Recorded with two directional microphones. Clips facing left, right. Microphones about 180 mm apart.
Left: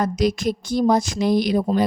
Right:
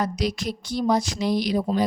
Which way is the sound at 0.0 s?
50° left (ahead or behind).